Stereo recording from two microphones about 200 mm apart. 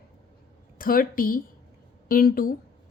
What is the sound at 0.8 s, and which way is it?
Speech, 45° left (ahead or behind).